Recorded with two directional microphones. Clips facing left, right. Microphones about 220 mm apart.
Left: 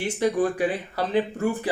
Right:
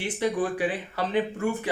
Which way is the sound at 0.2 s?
45° left (ahead or behind).